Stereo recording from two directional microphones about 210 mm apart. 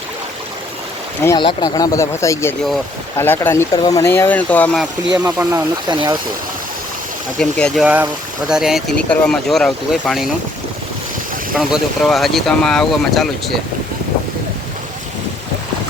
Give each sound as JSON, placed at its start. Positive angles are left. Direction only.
{"t": 1.2, "sound": "speech", "side_deg": 20}
{"t": 5.1, "sound": "speech", "side_deg": -10}
{"t": 5.9, "sound": "speech", "side_deg": -20}
{"t": 7.3, "sound": "speech", "side_deg": 5}
{"t": 7.9, "sound": "speech", "side_deg": -5}
{"t": 11.5, "sound": "speech", "side_deg": 0}